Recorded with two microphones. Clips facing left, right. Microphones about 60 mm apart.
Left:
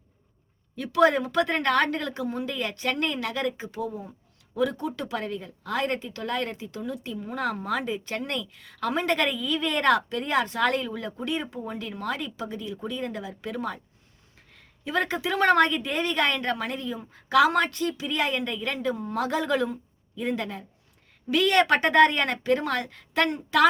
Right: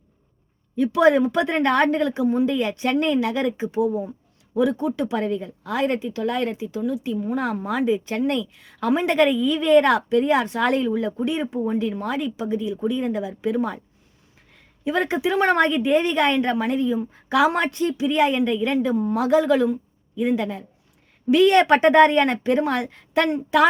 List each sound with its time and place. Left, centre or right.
0.8 s a woman's voice: centre
21.2 s a woman's voice: right